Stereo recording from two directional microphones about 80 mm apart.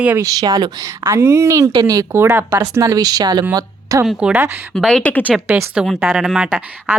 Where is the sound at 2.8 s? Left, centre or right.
Right.